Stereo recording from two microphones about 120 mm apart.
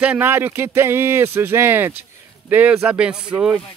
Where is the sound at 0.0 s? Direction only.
15° right (ahead or behind).